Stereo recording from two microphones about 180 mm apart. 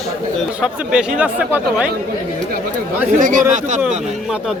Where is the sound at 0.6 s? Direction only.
5° right (ahead or behind).